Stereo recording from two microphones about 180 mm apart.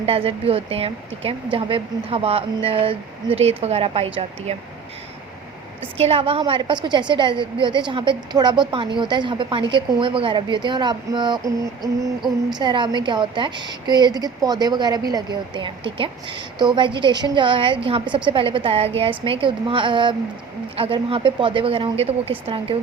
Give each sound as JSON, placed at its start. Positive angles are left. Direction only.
{"t": 0.0, "sound": "speech", "side_deg": -30}
{"t": 6.0, "sound": "a woman's voice", "side_deg": -30}